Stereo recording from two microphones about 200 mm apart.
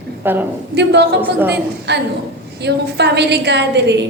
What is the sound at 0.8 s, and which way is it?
A woman's voice, 60° right (ahead or behind).